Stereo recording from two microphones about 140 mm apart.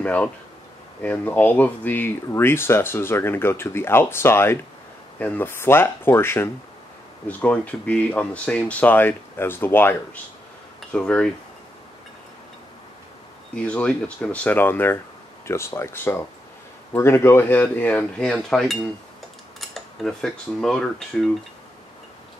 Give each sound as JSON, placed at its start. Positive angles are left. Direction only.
{"t": 0.0, "sound": "speech", "side_deg": 10}
{"t": 13.7, "sound": "speech", "side_deg": 10}